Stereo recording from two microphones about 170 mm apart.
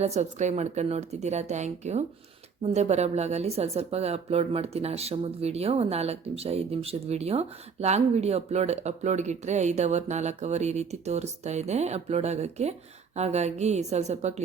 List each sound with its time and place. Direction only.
0.0 s speech: 40° right (ahead or behind)